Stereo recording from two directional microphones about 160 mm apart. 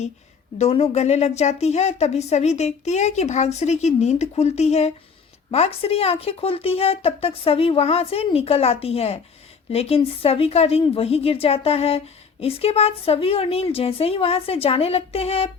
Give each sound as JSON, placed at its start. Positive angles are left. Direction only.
{"t": 0.6, "sound": "a woman's voice", "side_deg": 40}